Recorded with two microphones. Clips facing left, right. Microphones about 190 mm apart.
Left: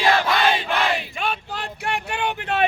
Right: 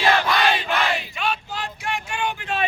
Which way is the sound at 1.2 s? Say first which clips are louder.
Even; 55° left (ahead or behind).